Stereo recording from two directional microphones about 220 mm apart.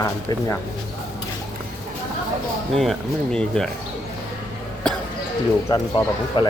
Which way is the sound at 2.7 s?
Centre (ahead or behind).